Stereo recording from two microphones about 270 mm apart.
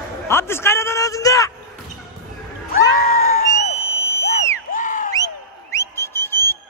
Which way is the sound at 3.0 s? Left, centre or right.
Left.